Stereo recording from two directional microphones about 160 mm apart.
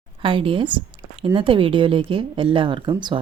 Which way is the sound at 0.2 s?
35° right (ahead or behind).